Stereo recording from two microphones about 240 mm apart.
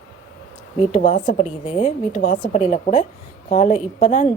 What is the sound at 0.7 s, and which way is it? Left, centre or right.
A woman's voice, left.